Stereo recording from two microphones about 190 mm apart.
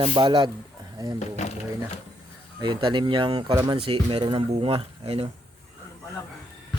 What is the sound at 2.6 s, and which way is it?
Speech, 25° right (ahead or behind).